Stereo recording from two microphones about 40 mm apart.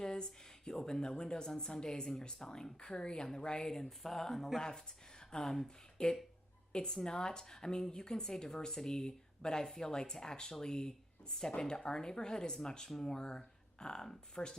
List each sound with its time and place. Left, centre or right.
0.0 s a woman's voice: centre